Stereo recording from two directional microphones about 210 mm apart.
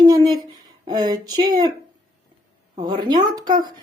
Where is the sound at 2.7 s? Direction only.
20° right (ahead or behind).